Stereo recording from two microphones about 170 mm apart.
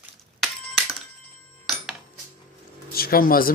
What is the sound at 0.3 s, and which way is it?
Chink, centre (ahead or behind).